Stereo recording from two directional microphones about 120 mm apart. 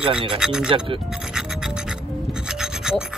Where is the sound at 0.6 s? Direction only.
45° right (ahead or behind).